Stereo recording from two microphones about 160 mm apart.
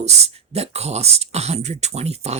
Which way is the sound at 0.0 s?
40° right (ahead or behind).